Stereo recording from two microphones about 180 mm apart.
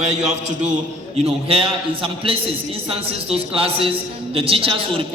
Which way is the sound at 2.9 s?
30° right (ahead or behind).